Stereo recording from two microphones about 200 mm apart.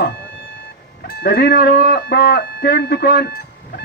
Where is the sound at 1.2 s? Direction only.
55° left (ahead or behind).